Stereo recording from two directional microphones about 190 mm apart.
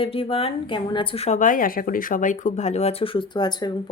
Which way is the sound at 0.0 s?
30° left (ahead or behind).